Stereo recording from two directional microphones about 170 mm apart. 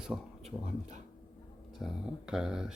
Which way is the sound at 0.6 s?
45° right (ahead or behind).